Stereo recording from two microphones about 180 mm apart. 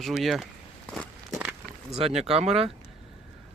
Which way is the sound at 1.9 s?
35° right (ahead or behind).